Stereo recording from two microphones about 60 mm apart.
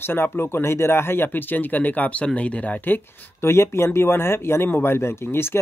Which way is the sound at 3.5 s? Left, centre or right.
Left.